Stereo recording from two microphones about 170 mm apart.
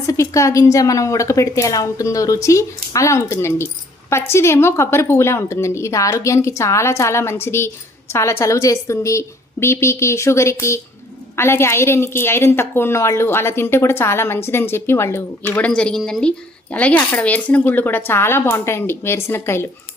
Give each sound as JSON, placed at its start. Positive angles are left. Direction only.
{"t": 0.1, "sound": "a woman's voice", "side_deg": 20}